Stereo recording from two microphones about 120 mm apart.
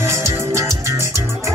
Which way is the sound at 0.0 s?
25° right (ahead or behind).